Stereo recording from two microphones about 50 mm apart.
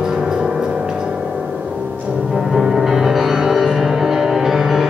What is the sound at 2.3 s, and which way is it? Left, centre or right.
Music, centre.